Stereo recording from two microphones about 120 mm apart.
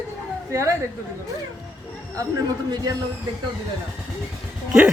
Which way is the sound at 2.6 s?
35° right (ahead or behind).